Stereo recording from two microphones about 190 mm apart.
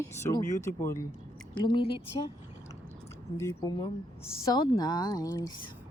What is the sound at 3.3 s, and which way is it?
Speech, 15° left (ahead or behind).